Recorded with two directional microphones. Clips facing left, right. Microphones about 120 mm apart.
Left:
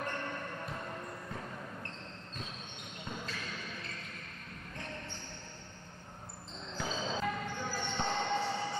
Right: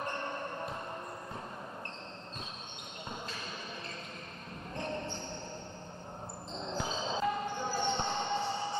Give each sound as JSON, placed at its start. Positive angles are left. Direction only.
{"t": 0.0, "sound": "basketball bounce", "side_deg": -25}
{"t": 3.1, "sound": "basketball bounce", "side_deg": -25}
{"t": 6.6, "sound": "basketball bounce", "side_deg": -25}